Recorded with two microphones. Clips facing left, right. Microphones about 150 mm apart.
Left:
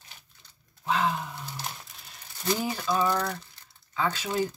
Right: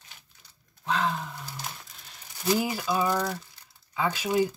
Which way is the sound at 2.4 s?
5° right (ahead or behind).